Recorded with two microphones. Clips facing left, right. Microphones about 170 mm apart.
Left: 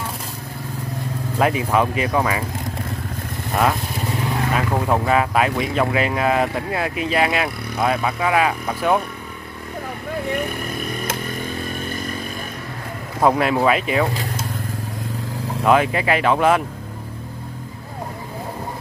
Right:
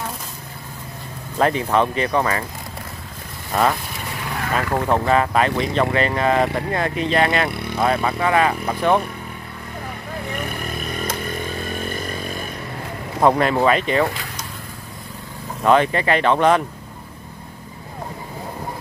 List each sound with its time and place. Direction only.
1.4 s speech: 10° left (ahead or behind)
4.2 s vehicle: 20° left (ahead or behind)
4.6 s speech: 10° left (ahead or behind)
13.2 s speech: 5° left (ahead or behind)
15.6 s speech: 5° left (ahead or behind)